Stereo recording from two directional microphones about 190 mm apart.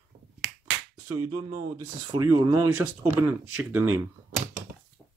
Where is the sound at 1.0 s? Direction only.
15° right (ahead or behind).